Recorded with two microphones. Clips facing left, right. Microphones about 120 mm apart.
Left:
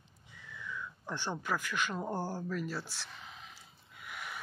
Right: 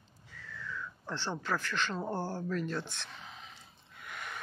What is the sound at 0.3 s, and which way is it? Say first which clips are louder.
Speech: right 1 dB; 15° left (ahead or behind).